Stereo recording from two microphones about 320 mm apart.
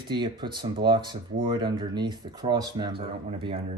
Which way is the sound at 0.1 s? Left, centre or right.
Centre.